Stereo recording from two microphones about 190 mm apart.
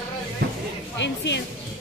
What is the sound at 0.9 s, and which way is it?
Speech, 70° left (ahead or behind).